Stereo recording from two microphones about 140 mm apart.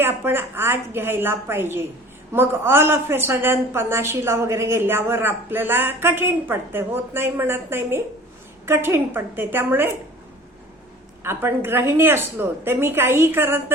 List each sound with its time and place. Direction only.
0.0 s a woman's voice: 15° right (ahead or behind)
11.2 s a woman's voice: 15° right (ahead or behind)